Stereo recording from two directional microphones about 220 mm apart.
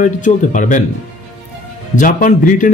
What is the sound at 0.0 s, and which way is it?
Speech, 35° left (ahead or behind).